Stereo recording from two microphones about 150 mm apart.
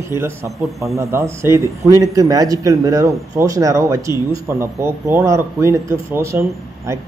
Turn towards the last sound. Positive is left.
turn(degrees=-15)  # may be behind; listen again after turning